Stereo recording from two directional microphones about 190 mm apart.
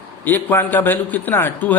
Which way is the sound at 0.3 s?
10° left (ahead or behind).